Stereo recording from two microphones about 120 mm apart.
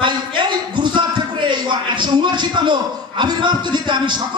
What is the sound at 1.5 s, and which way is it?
A man's voice, 40° right (ahead or behind).